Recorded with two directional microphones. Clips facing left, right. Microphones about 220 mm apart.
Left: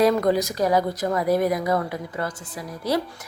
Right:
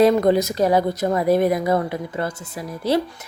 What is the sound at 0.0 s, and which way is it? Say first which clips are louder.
A woman's voice: right 4 dB; 25° right (ahead or behind).